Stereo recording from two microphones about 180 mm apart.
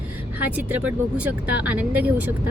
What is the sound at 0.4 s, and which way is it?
A woman's voice, 10° right (ahead or behind).